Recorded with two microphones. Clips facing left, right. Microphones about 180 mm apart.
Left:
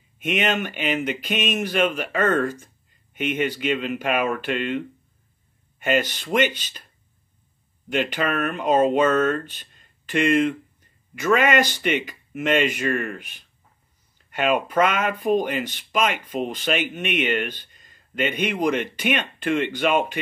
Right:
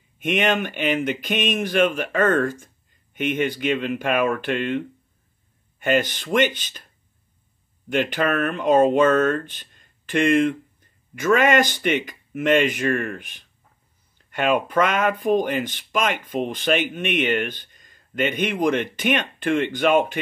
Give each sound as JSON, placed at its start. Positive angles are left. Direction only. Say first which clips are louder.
{"t": 0.2, "sound": "speech", "louder": "right 2 dB", "side_deg": -50}
{"t": 5.9, "sound": "speech", "louder": "right 1 dB", "side_deg": -50}
{"t": 7.9, "sound": "speech", "louder": "right 2 dB", "side_deg": -50}